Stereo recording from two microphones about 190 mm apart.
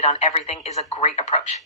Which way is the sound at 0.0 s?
35° left (ahead or behind).